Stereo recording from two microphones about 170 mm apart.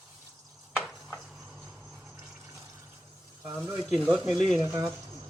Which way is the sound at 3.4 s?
15° right (ahead or behind).